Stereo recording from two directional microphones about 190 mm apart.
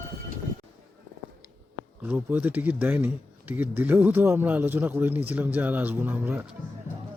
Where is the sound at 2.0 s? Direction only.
10° right (ahead or behind).